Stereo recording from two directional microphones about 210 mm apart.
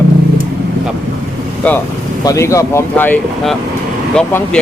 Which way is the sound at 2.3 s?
15° left (ahead or behind).